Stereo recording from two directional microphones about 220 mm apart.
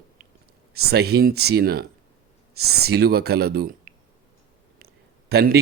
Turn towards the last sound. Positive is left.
turn(degrees=-45)  # may be behind; listen again after turning